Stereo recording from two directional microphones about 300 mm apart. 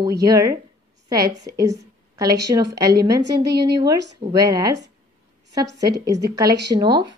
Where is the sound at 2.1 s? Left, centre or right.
Centre.